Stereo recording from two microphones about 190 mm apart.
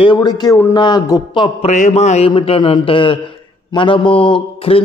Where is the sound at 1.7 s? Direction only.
40° left (ahead or behind).